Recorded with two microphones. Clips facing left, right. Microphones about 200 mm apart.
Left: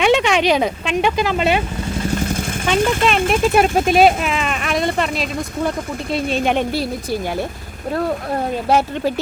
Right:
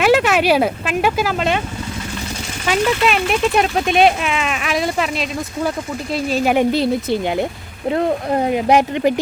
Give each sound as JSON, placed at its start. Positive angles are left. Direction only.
{"t": 0.0, "sound": "speech", "side_deg": -5}
{"t": 2.8, "sound": "speech", "side_deg": 50}
{"t": 3.2, "sound": "speech", "side_deg": 0}
{"t": 6.7, "sound": "speech", "side_deg": -25}
{"t": 8.4, "sound": "speech", "side_deg": -15}